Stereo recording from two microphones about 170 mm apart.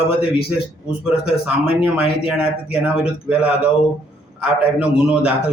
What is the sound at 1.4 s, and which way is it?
Speech, 5° right (ahead or behind).